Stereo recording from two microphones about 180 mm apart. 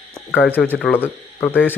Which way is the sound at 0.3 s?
5° left (ahead or behind).